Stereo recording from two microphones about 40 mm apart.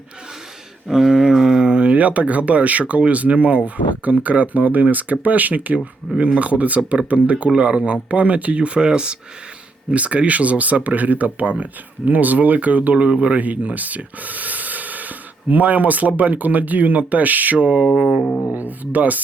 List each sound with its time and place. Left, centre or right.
0.9 s a sound: centre
1.6 s speech: right
9.9 s speech: right
17.9 s music: centre
18.2 s music: left
18.5 s speech: right